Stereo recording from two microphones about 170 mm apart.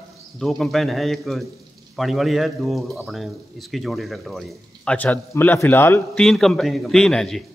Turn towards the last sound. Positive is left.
turn(degrees=5)  # may be behind; listen again after turning